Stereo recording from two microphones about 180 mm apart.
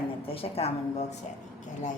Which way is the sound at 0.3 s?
35° left (ahead or behind).